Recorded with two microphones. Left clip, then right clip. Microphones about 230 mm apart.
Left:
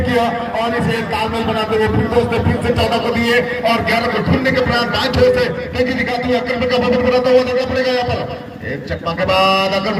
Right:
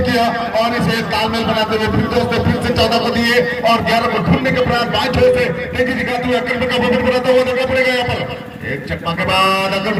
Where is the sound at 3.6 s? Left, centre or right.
Right.